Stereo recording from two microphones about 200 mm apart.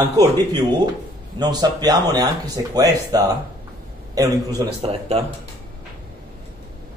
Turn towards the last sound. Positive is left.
turn(degrees=-30)  # may be behind; listen again after turning